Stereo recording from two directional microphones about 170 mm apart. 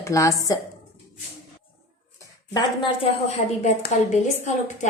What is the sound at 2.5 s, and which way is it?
Speech, 25° left (ahead or behind).